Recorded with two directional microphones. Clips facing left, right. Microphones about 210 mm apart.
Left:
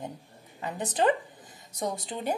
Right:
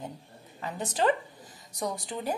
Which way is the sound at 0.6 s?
20° left (ahead or behind).